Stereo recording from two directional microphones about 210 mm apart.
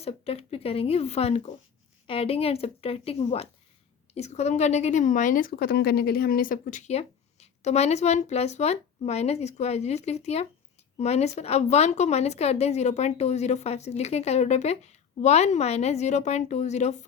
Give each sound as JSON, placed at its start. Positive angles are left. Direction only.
{"t": 0.0, "sound": "speech", "side_deg": 30}